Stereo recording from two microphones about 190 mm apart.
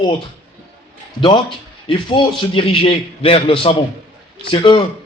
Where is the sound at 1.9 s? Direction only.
25° left (ahead or behind).